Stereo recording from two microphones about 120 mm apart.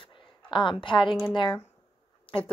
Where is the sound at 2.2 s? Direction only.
50° left (ahead or behind).